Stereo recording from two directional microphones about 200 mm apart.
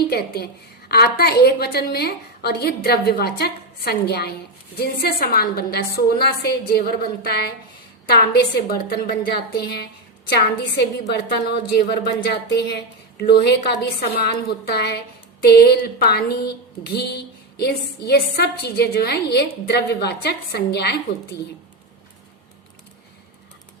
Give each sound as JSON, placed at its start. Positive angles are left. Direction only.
{"t": 0.1, "sound": "a woman's voice", "side_deg": 50}